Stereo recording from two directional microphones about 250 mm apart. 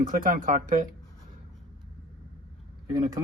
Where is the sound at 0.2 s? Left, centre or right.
Right.